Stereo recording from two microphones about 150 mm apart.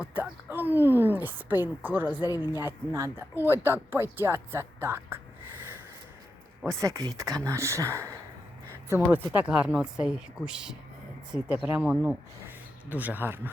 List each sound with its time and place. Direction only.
0.0 s a woman's voice: 10° right (ahead or behind)
6.7 s a woman's voice: 20° right (ahead or behind)